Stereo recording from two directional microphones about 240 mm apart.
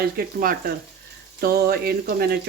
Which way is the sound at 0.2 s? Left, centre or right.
Right.